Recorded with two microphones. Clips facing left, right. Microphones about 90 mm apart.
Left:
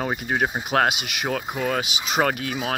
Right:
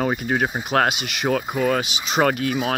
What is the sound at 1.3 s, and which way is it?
Speech, centre (ahead or behind).